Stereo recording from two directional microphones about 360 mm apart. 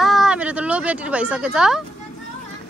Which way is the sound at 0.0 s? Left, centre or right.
Centre.